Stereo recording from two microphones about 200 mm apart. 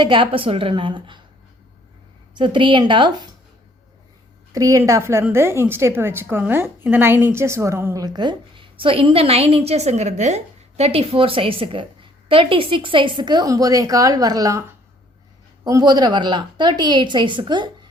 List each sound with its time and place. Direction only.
0.0 s a woman's voice: 25° right (ahead or behind)
2.3 s a woman's voice: 25° right (ahead or behind)
4.5 s a woman's voice: 15° right (ahead or behind)
15.6 s a woman's voice: 20° right (ahead or behind)